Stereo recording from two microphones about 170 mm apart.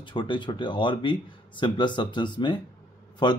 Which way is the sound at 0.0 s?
30° left (ahead or behind).